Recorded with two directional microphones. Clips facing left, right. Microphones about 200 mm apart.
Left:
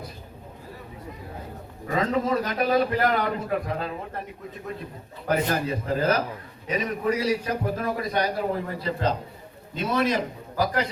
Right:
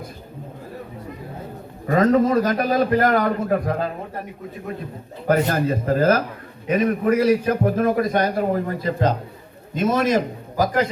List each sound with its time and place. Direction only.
2.0 s a man's voice: 45° right (ahead or behind)
5.5 s a man's voice: 50° right (ahead or behind)